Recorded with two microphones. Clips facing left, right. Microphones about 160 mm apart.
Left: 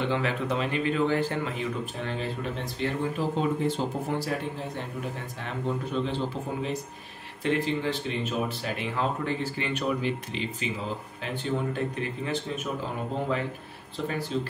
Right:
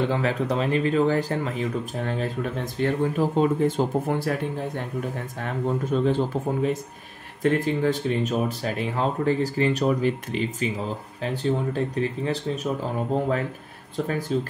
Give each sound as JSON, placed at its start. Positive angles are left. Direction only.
{"t": 0.1, "sound": "speech", "side_deg": -40}
{"t": 5.4, "sound": "speech", "side_deg": -45}
{"t": 13.9, "sound": "speech", "side_deg": -45}